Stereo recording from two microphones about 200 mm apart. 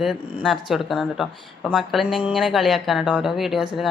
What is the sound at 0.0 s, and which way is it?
Speech, centre (ahead or behind).